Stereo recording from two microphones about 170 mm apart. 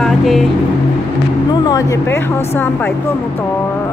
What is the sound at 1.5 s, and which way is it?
Speech, 25° left (ahead or behind).